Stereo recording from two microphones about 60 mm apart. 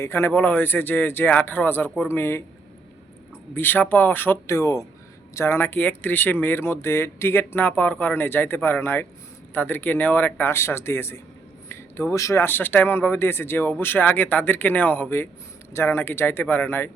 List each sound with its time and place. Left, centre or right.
0.0 s speech: left
0.3 s speech: left
3.5 s speech: left
4.4 s speech: left
5.5 s speech: left
10.5 s speech: left
12.4 s speech: left